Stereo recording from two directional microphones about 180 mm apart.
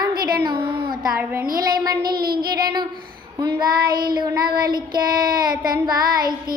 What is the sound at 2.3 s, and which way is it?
Child singing, 55° right (ahead or behind).